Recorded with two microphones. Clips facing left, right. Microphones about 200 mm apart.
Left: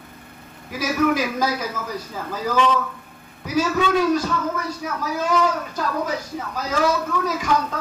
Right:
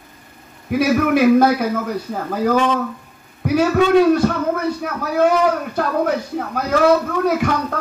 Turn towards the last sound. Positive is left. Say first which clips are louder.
# right 5 dB
turn(degrees=-60)  # may be behind; listen again after turning